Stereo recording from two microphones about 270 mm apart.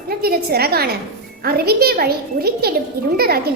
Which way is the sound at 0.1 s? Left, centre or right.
Right.